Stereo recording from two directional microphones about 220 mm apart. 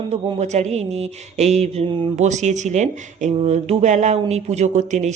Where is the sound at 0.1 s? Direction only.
30° right (ahead or behind).